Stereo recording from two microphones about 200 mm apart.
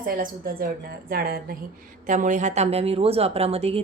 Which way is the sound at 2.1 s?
40° right (ahead or behind).